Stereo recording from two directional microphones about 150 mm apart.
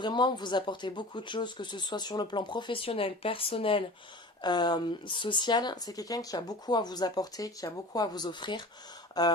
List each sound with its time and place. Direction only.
0.0 s speech: 30° left (ahead or behind)